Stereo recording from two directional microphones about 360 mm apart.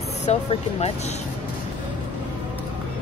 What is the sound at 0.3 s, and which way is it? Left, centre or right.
Speech, centre.